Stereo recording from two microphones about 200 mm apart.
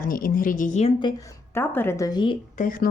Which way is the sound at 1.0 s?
20° left (ahead or behind).